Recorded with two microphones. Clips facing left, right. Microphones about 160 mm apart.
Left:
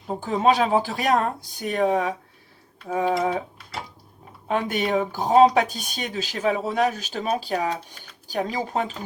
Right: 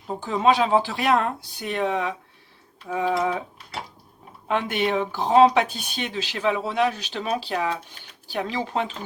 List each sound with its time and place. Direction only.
0.1 s speech: 45° left (ahead or behind)
2.9 s a sound: 40° left (ahead or behind)
4.4 s speech: 40° left (ahead or behind)